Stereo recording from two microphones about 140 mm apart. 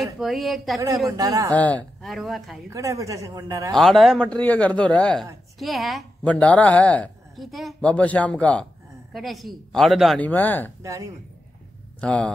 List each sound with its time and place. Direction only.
0.0 s a woman's voice: centre (ahead or behind)
1.1 s a man's voice: 25° right (ahead or behind)
1.6 s a man's voice: 10° left (ahead or behind)
2.0 s a woman's voice: centre (ahead or behind)
2.7 s a man's voice: 20° right (ahead or behind)
3.7 s a man's voice: centre (ahead or behind)
10.2 s a man's voice: 10° left (ahead or behind)
10.8 s speech: 25° right (ahead or behind)
12.0 s speech: 10° left (ahead or behind)